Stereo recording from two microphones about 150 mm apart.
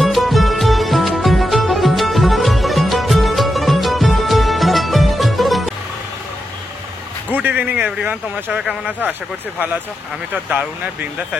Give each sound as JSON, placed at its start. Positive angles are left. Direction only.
{"t": 0.0, "sound": "music", "side_deg": 0}
{"t": 7.3, "sound": "speech", "side_deg": -10}
{"t": 10.3, "sound": "speech", "side_deg": -10}